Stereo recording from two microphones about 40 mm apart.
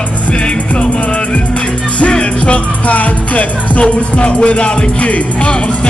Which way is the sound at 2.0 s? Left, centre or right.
Left.